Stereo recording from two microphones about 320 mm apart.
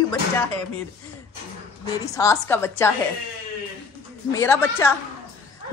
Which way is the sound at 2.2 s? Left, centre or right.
Centre.